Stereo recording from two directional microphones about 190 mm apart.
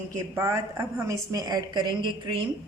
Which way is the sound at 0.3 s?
15° right (ahead or behind).